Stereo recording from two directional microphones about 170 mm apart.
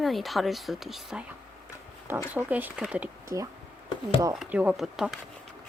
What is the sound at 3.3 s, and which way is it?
Speech, 15° right (ahead or behind).